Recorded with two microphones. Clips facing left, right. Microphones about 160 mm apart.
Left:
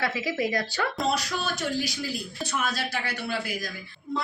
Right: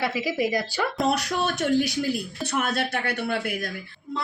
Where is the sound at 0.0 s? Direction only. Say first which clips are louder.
Right 2 dB; 10° right (ahead or behind).